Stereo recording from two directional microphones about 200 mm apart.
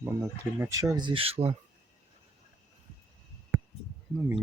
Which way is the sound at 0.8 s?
20° right (ahead or behind).